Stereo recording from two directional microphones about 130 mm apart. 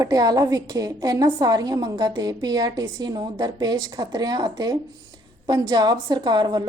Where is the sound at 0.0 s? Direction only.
30° right (ahead or behind).